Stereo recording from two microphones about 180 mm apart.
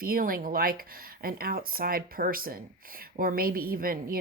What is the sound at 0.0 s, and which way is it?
Speech, 50° right (ahead or behind).